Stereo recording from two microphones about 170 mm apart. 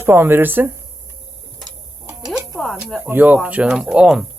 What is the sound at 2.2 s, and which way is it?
Music, centre (ahead or behind).